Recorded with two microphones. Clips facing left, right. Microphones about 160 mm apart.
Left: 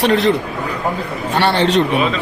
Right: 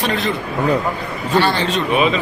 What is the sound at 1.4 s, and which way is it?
Speech, 65° left (ahead or behind).